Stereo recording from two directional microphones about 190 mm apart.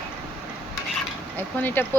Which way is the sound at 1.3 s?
10° left (ahead or behind).